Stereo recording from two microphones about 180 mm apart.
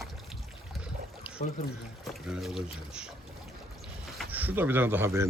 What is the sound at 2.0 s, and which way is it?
Speech, centre (ahead or behind).